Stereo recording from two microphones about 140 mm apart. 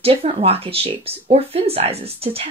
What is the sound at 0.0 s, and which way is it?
Speech, 45° right (ahead or behind).